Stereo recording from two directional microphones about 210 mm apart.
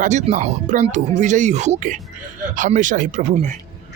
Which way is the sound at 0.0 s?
35° right (ahead or behind).